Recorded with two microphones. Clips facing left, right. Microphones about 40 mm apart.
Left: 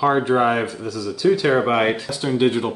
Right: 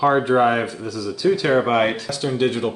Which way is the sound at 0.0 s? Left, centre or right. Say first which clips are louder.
Right 1 dB; centre.